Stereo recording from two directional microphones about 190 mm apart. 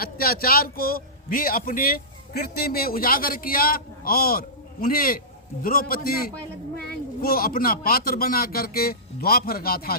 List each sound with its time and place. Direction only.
0.0 s a man's voice: 50° left (ahead or behind)